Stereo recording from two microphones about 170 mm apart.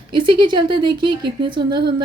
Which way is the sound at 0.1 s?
25° right (ahead or behind).